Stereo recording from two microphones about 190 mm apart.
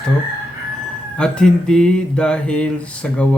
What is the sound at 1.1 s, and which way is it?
Speech, 5° left (ahead or behind).